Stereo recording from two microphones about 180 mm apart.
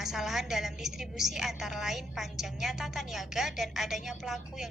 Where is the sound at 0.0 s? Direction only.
Centre (ahead or behind).